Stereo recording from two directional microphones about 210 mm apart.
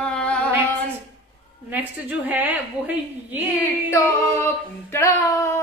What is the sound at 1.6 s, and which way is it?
A woman's voice, 10° right (ahead or behind).